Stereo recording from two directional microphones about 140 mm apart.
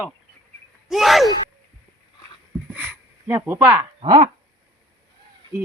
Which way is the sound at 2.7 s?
15° right (ahead or behind).